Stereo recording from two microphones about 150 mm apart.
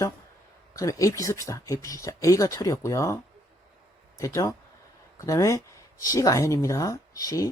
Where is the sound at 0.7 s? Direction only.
20° left (ahead or behind).